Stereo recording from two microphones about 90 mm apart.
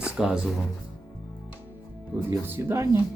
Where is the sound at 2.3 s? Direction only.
30° right (ahead or behind).